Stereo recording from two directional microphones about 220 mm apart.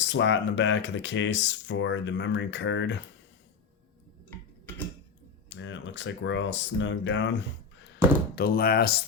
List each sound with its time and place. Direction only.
0.0 s speech: 55° left (ahead or behind)
5.5 s speech: 55° left (ahead or behind)
8.4 s speech: 45° left (ahead or behind)